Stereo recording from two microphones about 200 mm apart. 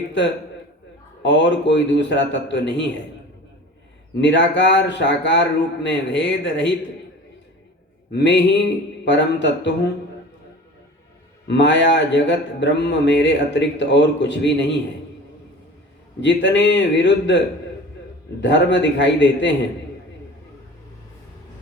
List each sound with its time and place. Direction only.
1.2 s speech: 60° left (ahead or behind)
4.2 s speech: 60° left (ahead or behind)
8.1 s speech: 60° left (ahead or behind)
11.4 s speech: 60° left (ahead or behind)
16.2 s speech: 60° left (ahead or behind)